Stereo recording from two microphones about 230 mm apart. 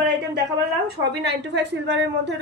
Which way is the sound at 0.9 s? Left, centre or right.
Right.